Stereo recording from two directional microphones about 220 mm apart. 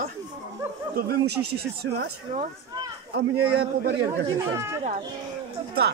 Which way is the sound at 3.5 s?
50° right (ahead or behind).